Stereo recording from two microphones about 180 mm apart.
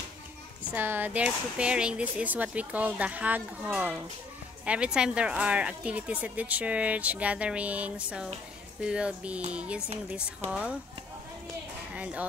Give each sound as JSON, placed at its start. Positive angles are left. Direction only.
{"t": 0.7, "sound": "a woman's voice", "side_deg": -10}
{"t": 11.9, "sound": "speech", "side_deg": -5}